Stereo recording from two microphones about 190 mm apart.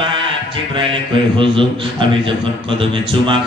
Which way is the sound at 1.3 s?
25° right (ahead or behind).